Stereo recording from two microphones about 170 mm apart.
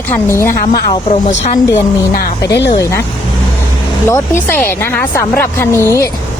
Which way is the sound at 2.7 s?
20° left (ahead or behind).